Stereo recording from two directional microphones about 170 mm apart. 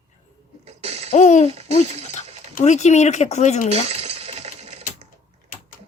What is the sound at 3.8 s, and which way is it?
Coin, 40° right (ahead or behind).